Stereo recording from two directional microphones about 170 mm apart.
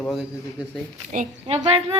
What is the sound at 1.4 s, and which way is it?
Speech, 30° right (ahead or behind).